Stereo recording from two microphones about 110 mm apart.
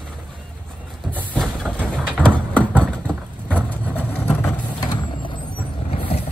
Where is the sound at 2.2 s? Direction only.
15° right (ahead or behind).